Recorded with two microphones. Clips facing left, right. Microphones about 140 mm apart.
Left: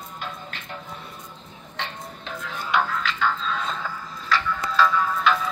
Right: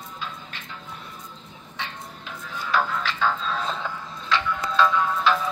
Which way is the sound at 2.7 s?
5° right (ahead or behind).